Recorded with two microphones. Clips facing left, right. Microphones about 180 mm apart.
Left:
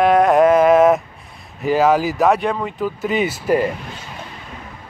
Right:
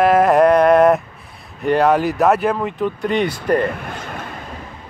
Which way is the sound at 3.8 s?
55° right (ahead or behind).